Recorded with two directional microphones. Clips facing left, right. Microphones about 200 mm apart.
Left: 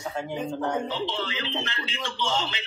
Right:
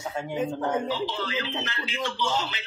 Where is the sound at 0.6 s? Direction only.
5° right (ahead or behind).